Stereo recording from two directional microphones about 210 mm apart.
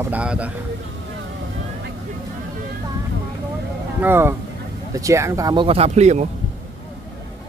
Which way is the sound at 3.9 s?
10° right (ahead or behind).